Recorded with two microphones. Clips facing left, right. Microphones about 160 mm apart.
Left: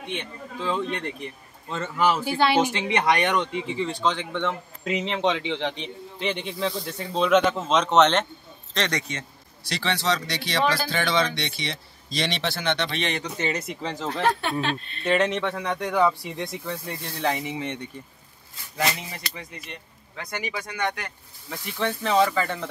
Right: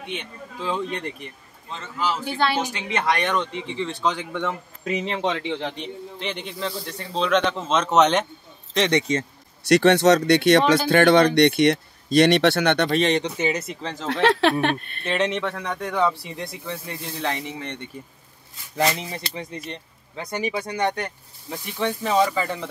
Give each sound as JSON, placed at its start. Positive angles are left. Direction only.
{"t": 0.1, "sound": "speech", "side_deg": -5}
{"t": 1.7, "sound": "a man's voice", "side_deg": 55}
{"t": 2.2, "sound": "speech", "side_deg": 10}
{"t": 3.9, "sound": "speech", "side_deg": -5}
{"t": 8.7, "sound": "speech", "side_deg": -20}
{"t": 9.7, "sound": "speech", "side_deg": -65}
{"t": 13.4, "sound": "speech", "side_deg": -5}
{"t": 14.2, "sound": "speech", "side_deg": -80}
{"t": 15.0, "sound": "speech", "side_deg": 0}
{"t": 18.8, "sound": "speech", "side_deg": -25}
{"t": 21.5, "sound": "speech", "side_deg": -15}